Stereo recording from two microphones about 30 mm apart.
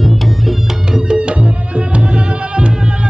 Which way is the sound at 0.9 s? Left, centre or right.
Right.